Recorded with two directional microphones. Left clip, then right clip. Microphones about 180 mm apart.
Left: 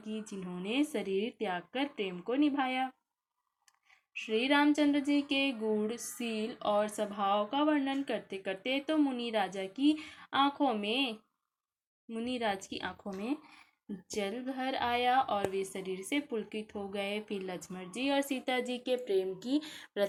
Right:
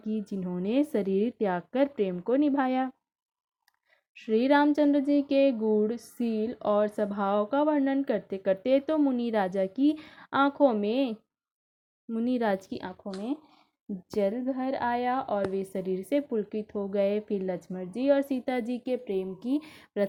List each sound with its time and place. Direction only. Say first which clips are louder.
0.1 s a woman's voice: right 7 dB; 50° right (ahead or behind)
4.1 s a woman's voice: right 6 dB; 50° right (ahead or behind)
12.1 s a woman's voice: right 6 dB; 50° right (ahead or behind)
14.1 s a woman's voice: right 8 dB; 40° right (ahead or behind)